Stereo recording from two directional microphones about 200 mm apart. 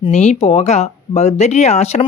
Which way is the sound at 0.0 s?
30° left (ahead or behind).